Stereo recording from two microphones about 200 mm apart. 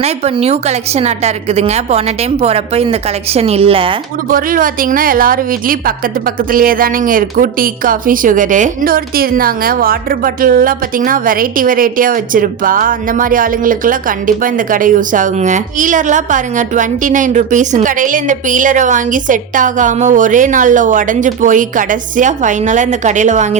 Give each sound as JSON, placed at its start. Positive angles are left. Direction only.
{"t": 0.0, "sound": "a woman's voice", "side_deg": -30}
{"t": 4.3, "sound": "a woman's voice", "side_deg": -45}